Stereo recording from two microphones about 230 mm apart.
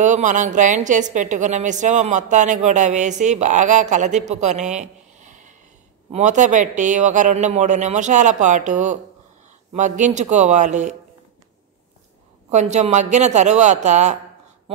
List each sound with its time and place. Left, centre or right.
0.0 s a woman's voice: right
12.4 s a woman's voice: right